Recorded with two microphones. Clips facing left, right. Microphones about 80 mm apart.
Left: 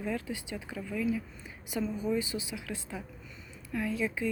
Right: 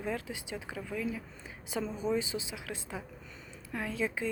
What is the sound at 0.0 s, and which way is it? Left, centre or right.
Speech, right.